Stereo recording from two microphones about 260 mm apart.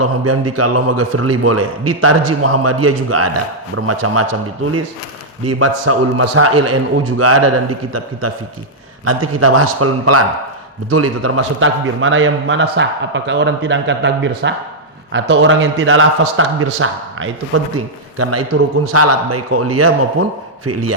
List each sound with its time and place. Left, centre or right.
0.0 s a man's voice: right
9.0 s a man's voice: right